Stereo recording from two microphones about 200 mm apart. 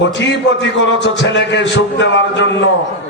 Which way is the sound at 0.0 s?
65° left (ahead or behind).